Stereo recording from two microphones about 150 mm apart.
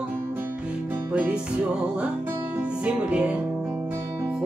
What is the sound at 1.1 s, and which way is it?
Music, 10° right (ahead or behind).